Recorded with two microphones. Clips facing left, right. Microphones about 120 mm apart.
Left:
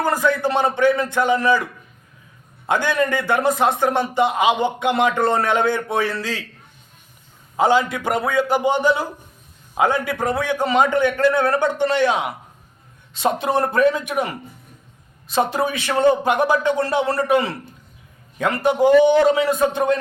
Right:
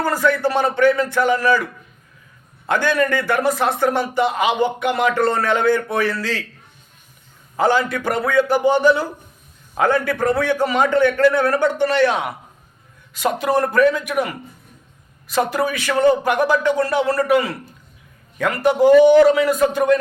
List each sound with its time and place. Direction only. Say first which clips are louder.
0.0 s a man's voice: right 1 dB; 20° left (ahead or behind)
2.6 s a man's voice: right 1 dB; 20° left (ahead or behind)
7.5 s a man's voice: even; 15° left (ahead or behind)